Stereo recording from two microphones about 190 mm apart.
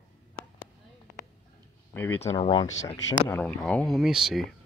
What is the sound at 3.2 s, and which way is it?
Speech, 10° left (ahead or behind).